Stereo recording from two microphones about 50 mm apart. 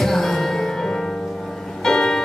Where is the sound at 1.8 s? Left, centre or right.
Centre.